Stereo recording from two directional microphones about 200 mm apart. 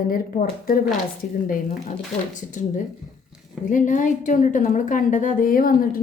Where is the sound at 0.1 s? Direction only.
45° left (ahead or behind).